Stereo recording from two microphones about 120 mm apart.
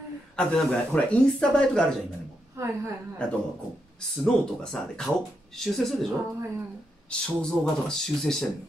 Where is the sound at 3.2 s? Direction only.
10° left (ahead or behind).